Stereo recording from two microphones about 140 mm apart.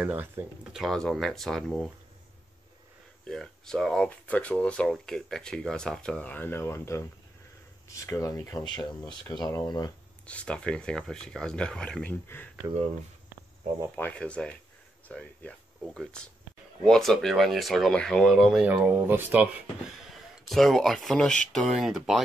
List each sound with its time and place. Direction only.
0.0 s speech: 10° right (ahead or behind)
0.7 s speech: centre (ahead or behind)
3.3 s speech: 5° left (ahead or behind); by 8.8 s 30° left (ahead or behind)
8.8 s speech: centre (ahead or behind)
9.4 s speech: 25° left (ahead or behind)
10.2 s speech: 10° left (ahead or behind)
13.9 s speech: 10° left (ahead or behind); by 19.5 s 15° right (ahead or behind)
20.4 s speech: centre (ahead or behind)